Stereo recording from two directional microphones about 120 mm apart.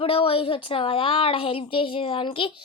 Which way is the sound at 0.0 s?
55° left (ahead or behind).